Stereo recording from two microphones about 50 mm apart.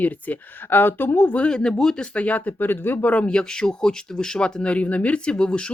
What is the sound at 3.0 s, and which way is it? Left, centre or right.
Speech, left.